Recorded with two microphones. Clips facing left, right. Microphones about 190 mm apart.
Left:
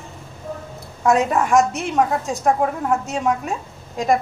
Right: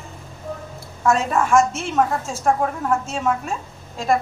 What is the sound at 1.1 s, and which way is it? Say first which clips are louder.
A woman's voice: left 2 dB; 15° left (ahead or behind).